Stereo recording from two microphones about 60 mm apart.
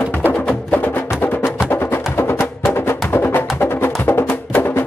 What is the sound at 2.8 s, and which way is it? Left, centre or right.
Music, left.